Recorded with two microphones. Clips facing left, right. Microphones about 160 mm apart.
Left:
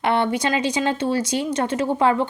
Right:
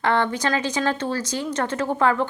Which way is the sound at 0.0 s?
15° left (ahead or behind).